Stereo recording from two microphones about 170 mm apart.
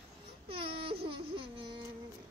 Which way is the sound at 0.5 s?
30° right (ahead or behind).